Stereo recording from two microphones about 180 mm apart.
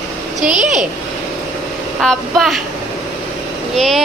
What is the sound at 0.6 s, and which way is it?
Speech, 40° right (ahead or behind).